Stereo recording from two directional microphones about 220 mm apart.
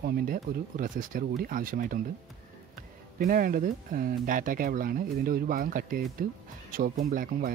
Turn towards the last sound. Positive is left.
turn(degrees=-40)  # may be behind; listen again after turning